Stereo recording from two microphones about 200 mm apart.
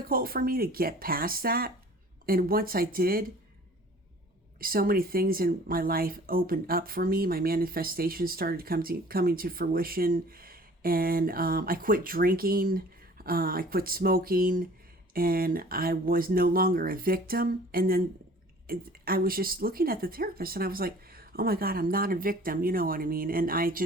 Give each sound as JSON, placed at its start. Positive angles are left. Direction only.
{"t": 0.1, "sound": "speech", "side_deg": -45}
{"t": 4.6, "sound": "speech", "side_deg": -45}